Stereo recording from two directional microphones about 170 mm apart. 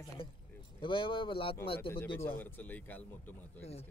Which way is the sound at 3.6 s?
40° left (ahead or behind).